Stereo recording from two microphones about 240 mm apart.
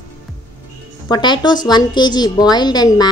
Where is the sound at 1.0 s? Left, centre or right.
Centre.